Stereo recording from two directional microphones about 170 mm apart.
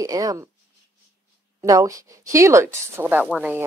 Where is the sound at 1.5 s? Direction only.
20° right (ahead or behind).